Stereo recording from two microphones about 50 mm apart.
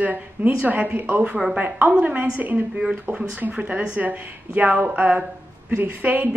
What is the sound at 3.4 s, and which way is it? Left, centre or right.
A woman's voice, right.